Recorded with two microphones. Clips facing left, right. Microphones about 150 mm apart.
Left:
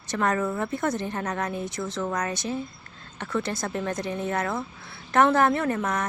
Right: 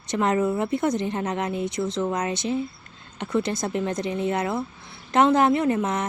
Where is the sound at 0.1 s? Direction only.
20° right (ahead or behind).